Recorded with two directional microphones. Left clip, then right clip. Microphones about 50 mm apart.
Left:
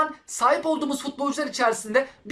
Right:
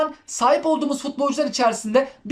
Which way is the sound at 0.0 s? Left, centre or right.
Right.